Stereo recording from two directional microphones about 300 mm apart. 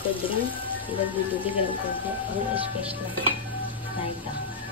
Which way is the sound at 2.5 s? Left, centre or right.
Centre.